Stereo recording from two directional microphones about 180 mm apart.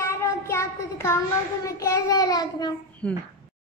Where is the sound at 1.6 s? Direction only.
15° left (ahead or behind).